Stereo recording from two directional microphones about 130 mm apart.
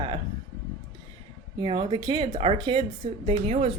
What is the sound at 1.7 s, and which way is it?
Speech, 40° right (ahead or behind).